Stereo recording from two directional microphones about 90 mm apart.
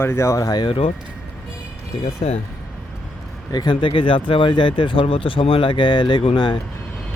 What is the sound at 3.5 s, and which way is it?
Speech, 55° left (ahead or behind).